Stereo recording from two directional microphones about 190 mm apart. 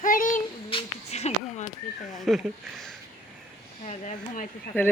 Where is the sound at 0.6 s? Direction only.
30° left (ahead or behind).